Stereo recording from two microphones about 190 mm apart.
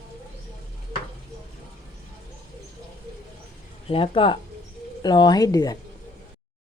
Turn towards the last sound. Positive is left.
turn(degrees=20)  # may be behind; listen again after turning